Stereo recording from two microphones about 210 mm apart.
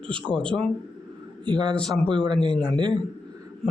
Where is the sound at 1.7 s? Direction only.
5° left (ahead or behind).